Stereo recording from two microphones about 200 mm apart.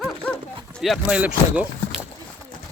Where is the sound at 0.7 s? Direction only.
Centre (ahead or behind).